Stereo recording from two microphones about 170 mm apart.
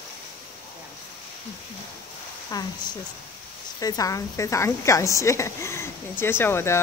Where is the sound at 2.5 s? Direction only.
25° left (ahead or behind).